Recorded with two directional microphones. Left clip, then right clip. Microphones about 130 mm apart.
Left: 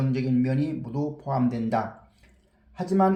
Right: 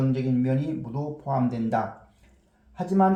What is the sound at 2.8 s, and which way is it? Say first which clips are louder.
Speech: even; 20° left (ahead or behind).